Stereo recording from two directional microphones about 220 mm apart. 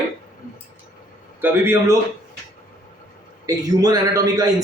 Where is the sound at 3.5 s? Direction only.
15° right (ahead or behind).